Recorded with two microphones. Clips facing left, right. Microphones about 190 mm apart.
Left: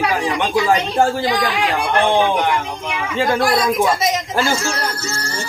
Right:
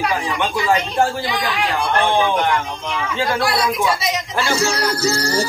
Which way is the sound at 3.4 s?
45° left (ahead or behind).